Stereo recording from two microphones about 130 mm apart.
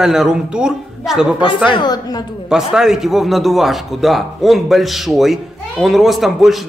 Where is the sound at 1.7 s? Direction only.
35° left (ahead or behind).